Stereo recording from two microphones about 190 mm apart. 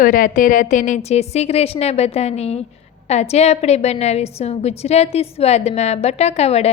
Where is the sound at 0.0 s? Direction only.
45° left (ahead or behind).